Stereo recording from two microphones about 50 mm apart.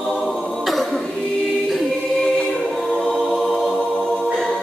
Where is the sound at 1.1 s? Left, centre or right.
Centre.